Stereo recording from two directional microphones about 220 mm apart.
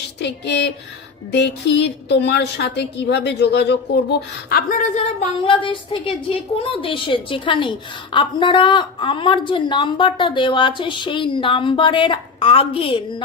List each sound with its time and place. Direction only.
0.2 s a woman's voice: 50° left (ahead or behind)
5.4 s a woman's voice: 20° left (ahead or behind)